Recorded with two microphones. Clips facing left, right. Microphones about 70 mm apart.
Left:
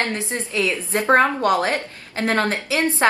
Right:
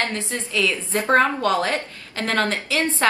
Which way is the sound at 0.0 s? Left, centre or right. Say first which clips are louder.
Left 1 dB; left.